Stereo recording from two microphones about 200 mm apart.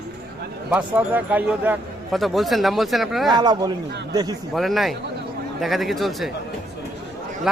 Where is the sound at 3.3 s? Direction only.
20° right (ahead or behind).